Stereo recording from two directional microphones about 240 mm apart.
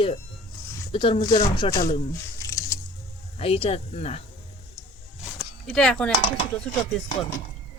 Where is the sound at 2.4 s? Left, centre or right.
Centre.